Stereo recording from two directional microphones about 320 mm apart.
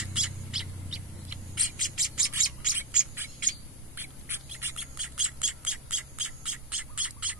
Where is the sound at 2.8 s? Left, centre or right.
Centre.